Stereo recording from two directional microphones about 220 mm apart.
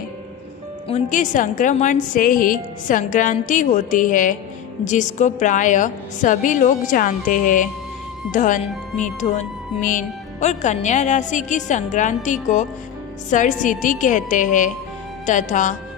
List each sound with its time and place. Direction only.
0.9 s a woman's voice: 30° left (ahead or behind)